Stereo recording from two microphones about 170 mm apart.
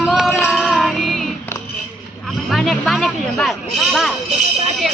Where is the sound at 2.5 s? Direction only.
Centre (ahead or behind).